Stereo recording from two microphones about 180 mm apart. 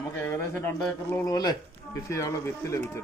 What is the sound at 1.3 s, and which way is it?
A man's voice, 20° left (ahead or behind).